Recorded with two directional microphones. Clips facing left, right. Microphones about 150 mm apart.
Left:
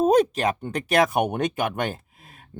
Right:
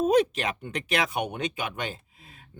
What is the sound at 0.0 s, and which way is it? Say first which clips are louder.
Speech: left 4 dB; 40° left (ahead or behind).